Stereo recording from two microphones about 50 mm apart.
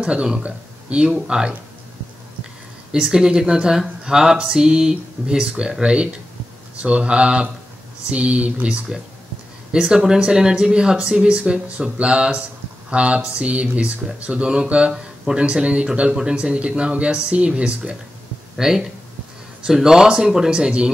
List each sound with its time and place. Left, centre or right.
0.0 s a man's voice: centre
2.9 s a man's voice: centre
18.6 s speech: centre